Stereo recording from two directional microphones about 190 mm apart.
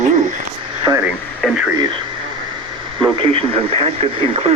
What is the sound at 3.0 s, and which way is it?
Speech, 30° right (ahead or behind).